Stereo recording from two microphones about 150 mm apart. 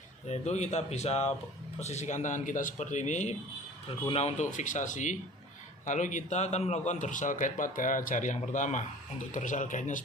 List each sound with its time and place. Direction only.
0.3 s speech: 50° left (ahead or behind)
3.8 s a man's voice: 40° left (ahead or behind); by 10.0 s 55° left (ahead or behind)